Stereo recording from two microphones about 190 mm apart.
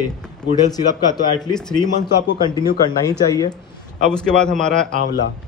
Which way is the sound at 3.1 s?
20° left (ahead or behind).